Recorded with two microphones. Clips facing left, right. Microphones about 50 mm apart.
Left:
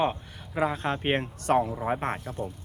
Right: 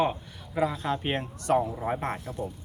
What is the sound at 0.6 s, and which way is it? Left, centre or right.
Speech, left.